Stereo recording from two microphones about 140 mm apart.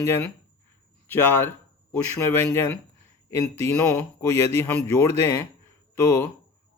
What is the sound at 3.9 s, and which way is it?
Speech, 15° left (ahead or behind).